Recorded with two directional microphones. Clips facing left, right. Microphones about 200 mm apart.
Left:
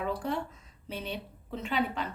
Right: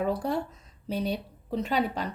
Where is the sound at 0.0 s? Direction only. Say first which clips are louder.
Right 4 dB; 40° right (ahead or behind).